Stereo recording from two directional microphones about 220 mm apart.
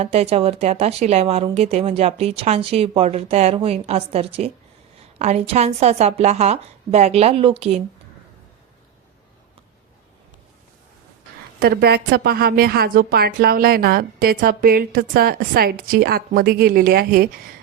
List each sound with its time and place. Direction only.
0.0 s speech: 30° right (ahead or behind)
11.6 s speech: 45° right (ahead or behind)